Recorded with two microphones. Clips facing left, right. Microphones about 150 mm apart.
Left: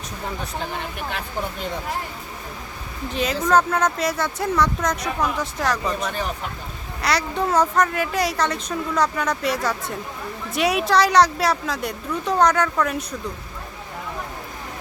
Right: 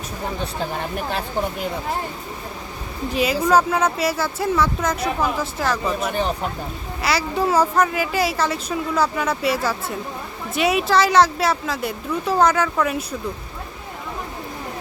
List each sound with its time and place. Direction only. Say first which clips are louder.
0.7 s speech: right 4 dB; 40° right (ahead or behind)
3.2 s speech: right 2 dB; 10° right (ahead or behind)